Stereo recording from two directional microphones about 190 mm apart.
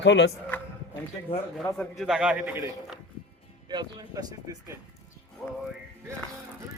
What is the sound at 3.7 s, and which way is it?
Speech, 20° right (ahead or behind).